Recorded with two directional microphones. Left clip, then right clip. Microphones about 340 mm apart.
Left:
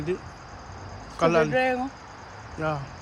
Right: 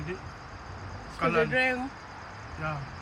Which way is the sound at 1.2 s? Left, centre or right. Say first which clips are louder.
Left 5 dB; centre.